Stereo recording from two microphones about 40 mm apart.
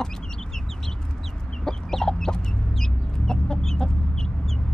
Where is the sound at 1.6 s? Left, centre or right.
Centre.